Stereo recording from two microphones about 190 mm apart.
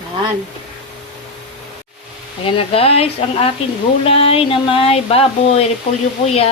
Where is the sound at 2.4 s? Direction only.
30° left (ahead or behind).